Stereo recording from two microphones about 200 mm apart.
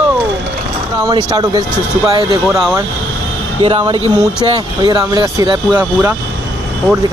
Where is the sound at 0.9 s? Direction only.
20° right (ahead or behind).